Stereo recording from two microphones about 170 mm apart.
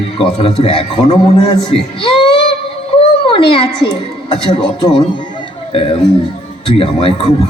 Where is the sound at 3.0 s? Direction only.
30° left (ahead or behind).